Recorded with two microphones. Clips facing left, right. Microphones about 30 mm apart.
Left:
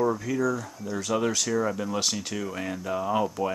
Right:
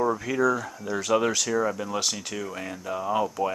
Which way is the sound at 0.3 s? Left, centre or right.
Right.